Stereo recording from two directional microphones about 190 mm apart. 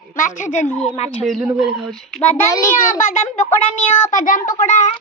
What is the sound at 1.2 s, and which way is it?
Speech, centre (ahead or behind).